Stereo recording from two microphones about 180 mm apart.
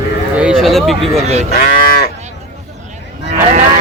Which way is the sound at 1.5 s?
55° left (ahead or behind).